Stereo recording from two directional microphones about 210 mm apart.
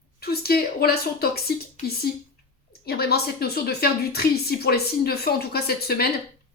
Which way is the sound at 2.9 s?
50° left (ahead or behind).